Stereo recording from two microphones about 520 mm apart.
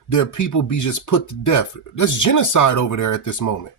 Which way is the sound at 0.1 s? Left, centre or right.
Left.